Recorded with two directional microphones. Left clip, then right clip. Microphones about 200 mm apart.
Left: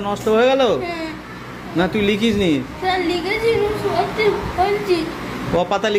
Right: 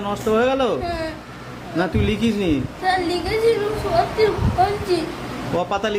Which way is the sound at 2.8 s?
20° right (ahead or behind).